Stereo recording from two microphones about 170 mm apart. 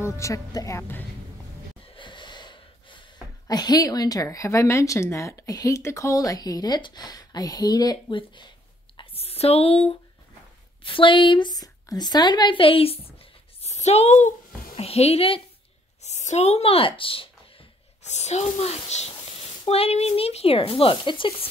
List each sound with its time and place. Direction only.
0.0 s a woman's voice: 20° left (ahead or behind)
2.0 s snort: 30° left (ahead or behind)
3.4 s speech: 20° left (ahead or behind)
8.9 s a sound: 35° left (ahead or behind)
10.8 s a woman's voice: 30° left (ahead or behind)
16.0 s a sound: 40° left (ahead or behind)
19.6 s speech: 35° left (ahead or behind)